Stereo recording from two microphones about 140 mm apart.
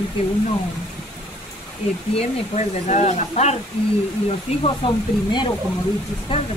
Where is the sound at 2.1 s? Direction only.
50° left (ahead or behind).